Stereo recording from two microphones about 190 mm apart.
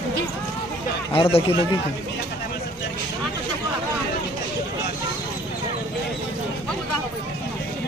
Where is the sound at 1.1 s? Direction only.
30° left (ahead or behind).